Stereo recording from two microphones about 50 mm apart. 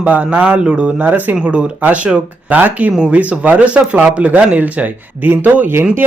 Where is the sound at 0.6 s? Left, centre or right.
Right.